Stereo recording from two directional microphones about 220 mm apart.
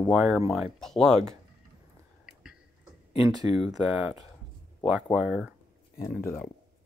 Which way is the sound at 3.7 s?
5° right (ahead or behind).